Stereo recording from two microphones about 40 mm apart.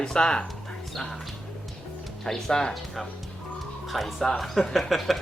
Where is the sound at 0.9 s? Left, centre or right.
Centre.